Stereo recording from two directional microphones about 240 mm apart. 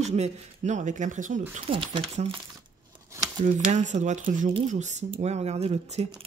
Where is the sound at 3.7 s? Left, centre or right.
Right.